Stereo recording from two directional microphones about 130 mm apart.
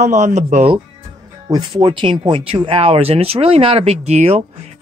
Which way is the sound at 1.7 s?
40° right (ahead or behind).